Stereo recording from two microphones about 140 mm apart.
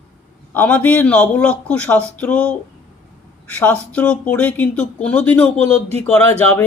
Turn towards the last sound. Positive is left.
turn(degrees=10)  # may be behind; listen again after turning